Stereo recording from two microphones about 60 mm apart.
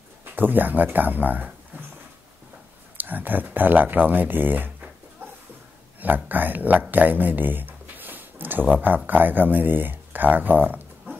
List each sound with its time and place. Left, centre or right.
0.2 s speech: right
3.0 s speech: right
5.9 s speech: right